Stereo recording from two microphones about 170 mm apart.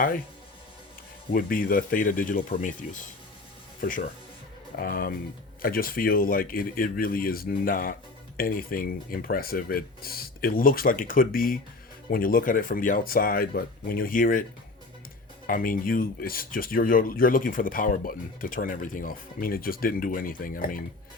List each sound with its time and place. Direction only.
1.3 s speech: 55° left (ahead or behind)
15.4 s speech: 55° left (ahead or behind)